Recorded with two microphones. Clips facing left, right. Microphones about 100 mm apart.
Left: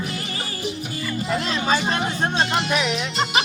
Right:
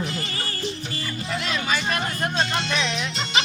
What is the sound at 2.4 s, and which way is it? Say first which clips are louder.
Speech: left 3 dB; 10° left (ahead or behind).